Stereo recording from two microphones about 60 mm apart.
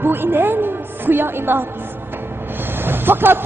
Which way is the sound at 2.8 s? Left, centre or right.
Right.